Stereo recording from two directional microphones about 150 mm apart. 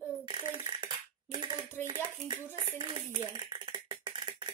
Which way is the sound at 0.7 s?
30° right (ahead or behind).